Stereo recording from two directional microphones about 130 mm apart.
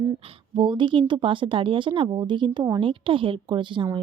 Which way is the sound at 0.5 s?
40° right (ahead or behind).